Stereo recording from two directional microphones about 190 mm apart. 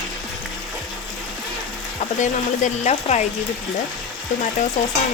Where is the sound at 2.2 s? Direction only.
40° left (ahead or behind).